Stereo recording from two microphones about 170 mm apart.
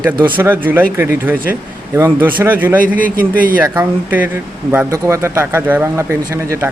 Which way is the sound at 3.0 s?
55° right (ahead or behind).